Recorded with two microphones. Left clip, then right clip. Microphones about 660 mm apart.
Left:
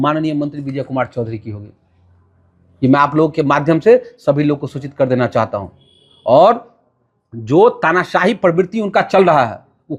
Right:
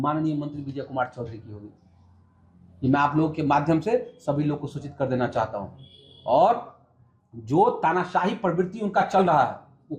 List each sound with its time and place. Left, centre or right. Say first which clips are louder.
0.0 s speech: left 10 dB; left
2.9 s speech: left 10 dB; left